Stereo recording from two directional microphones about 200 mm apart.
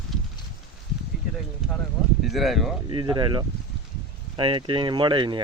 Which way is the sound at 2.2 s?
Centre (ahead or behind).